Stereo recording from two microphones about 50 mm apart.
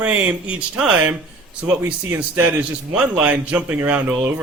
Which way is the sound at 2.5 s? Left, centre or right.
Right.